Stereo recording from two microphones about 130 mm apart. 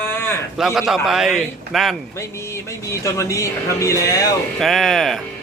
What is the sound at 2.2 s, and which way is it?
Speech, 20° left (ahead or behind).